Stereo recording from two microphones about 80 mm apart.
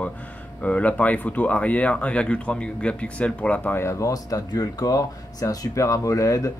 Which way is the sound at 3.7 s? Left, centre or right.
Left.